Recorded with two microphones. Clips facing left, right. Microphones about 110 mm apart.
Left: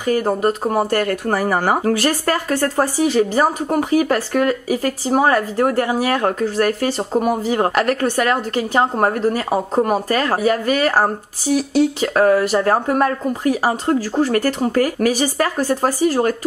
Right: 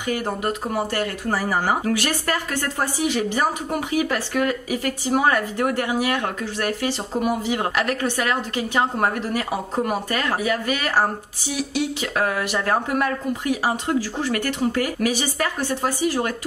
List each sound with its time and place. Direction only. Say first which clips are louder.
0.0 s speech: left 7 dB; 40° left (ahead or behind); by 2.0 s 55° left (ahead or behind)
2.0 s speech: left 5 dB; 40° left (ahead or behind)